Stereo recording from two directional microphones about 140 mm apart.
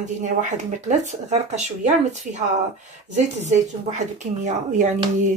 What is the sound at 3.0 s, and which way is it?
Speech, 60° right (ahead or behind).